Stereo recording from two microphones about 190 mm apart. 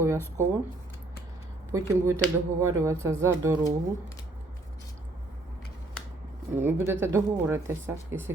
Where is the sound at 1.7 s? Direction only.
15° right (ahead or behind).